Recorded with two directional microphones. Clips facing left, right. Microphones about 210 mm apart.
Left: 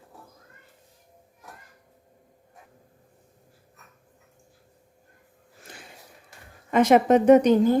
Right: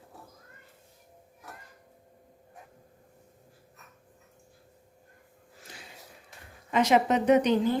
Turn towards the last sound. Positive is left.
turn(degrees=45)  # may be behind; listen again after turning